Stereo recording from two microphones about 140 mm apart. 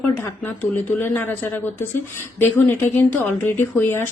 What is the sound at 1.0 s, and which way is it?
Speech, 15° left (ahead or behind).